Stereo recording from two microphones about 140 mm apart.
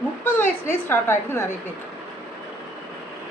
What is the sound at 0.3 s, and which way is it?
A woman's voice, 15° left (ahead or behind).